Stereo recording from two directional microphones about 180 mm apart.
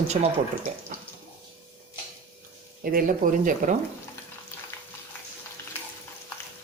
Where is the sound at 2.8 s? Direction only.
50° right (ahead or behind).